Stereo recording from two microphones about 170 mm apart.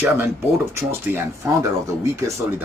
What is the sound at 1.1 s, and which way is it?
Speech, 10° right (ahead or behind).